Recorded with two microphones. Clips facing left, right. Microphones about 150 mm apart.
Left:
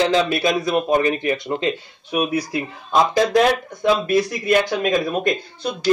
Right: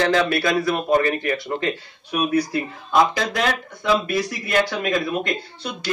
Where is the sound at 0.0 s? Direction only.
20° left (ahead or behind).